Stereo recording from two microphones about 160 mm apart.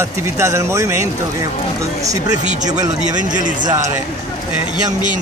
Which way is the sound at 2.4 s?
50° right (ahead or behind).